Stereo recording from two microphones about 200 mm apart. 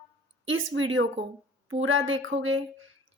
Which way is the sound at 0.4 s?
75° right (ahead or behind).